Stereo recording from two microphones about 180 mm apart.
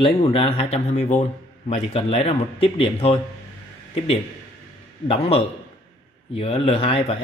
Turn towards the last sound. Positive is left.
turn(degrees=30)  # may be behind; listen again after turning